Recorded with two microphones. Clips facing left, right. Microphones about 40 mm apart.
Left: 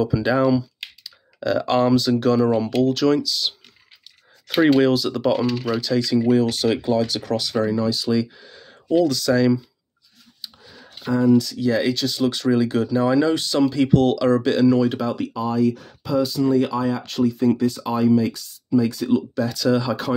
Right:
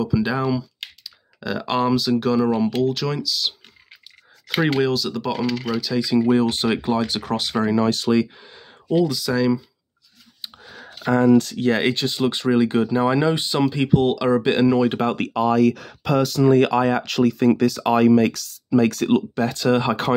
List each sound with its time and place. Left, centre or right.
0.0 s speech: centre
4.6 s speech: centre
6.1 s speech: right
7.7 s speech: right
8.4 s speech: centre
9.1 s speech: centre
11.0 s speech: right
11.9 s speech: right
15.2 s speech: right